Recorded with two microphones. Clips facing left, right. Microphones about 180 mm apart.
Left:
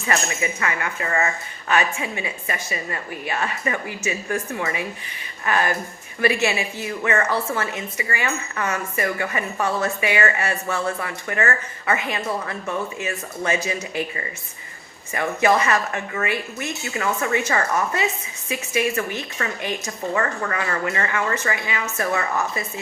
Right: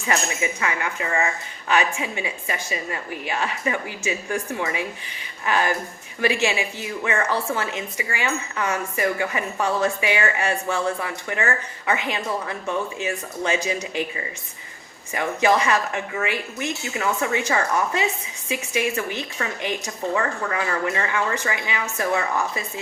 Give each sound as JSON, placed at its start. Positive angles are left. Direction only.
{"t": 0.1, "sound": "speech", "side_deg": -15}